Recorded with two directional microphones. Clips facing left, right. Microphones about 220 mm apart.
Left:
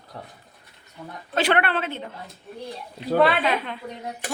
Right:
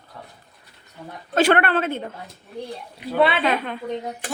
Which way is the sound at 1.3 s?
45° right (ahead or behind).